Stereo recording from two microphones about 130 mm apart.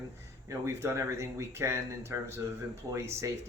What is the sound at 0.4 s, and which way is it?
Speech, 20° right (ahead or behind).